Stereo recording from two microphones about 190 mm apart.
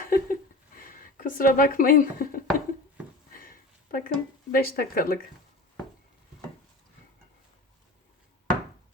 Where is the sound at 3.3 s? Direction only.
50° left (ahead or behind).